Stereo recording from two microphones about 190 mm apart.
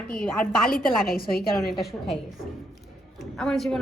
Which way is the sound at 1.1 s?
50° left (ahead or behind).